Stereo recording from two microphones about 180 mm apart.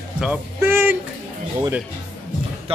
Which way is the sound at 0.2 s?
10° right (ahead or behind).